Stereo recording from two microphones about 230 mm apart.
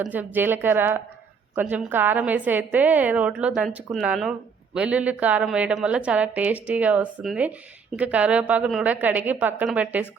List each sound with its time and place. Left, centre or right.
0.0 s a woman's voice: centre